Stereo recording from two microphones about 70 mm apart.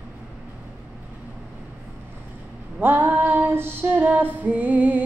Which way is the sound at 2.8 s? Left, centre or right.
Right.